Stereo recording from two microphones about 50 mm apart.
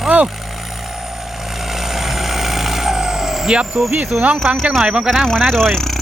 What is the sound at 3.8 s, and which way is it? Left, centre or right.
Speech, centre.